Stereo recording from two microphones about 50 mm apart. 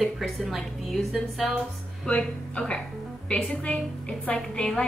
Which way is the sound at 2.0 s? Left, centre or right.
Left.